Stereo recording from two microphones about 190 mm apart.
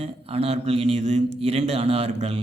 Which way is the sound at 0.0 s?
30° right (ahead or behind).